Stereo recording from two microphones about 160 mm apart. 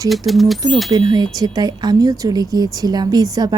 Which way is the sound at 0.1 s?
Centre (ahead or behind).